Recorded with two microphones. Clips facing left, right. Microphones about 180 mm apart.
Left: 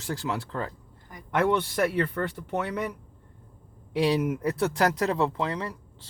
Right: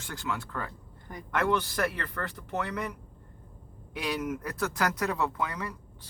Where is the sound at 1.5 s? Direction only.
25° left (ahead or behind).